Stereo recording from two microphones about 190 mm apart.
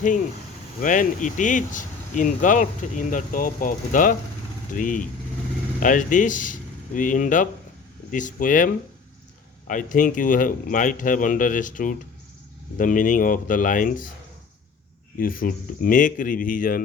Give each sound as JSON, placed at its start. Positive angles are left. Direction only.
{"t": 0.8, "sound": "speech", "side_deg": 40}
{"t": 15.2, "sound": "speech", "side_deg": 45}